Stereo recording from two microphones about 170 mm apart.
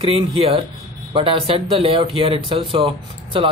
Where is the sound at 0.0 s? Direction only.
35° right (ahead or behind).